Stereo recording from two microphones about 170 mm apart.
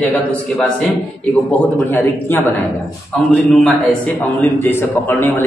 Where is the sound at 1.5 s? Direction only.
10° left (ahead or behind).